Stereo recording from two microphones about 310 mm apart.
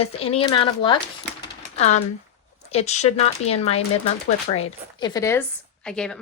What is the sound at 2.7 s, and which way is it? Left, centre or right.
Speech, left.